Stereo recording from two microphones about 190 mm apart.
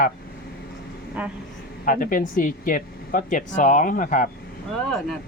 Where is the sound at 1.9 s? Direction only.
45° left (ahead or behind).